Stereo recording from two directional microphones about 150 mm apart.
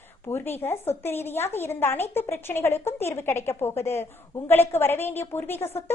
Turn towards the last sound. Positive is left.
turn(degrees=15)  # may be behind; listen again after turning